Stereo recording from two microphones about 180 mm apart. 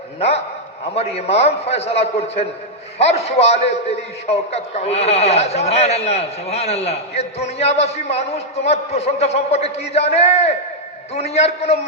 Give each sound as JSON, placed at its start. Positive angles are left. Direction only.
{"t": 0.2, "sound": "a man's voice", "side_deg": 35}